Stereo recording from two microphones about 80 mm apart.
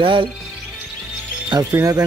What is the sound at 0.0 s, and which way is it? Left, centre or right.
Speech, right.